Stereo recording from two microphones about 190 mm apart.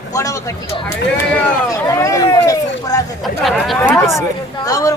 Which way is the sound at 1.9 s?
15° left (ahead or behind).